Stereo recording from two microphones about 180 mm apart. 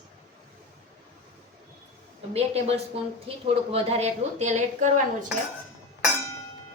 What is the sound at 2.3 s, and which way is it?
A woman's voice, 35° right (ahead or behind).